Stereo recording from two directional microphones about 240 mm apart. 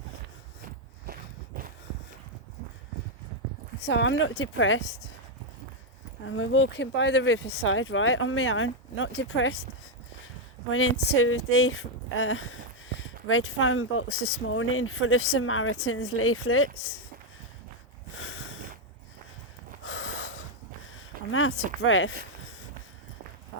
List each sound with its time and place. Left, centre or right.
1.5 s walk: right
3.8 s speech: left
6.2 s speech: left
10.7 s speech: left
11.1 s speech: left
18.2 s a sound: left
19.8 s gasp: left
21.2 s speech: left